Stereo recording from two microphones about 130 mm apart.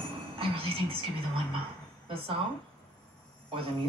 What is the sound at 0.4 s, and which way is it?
Music, 45° right (ahead or behind).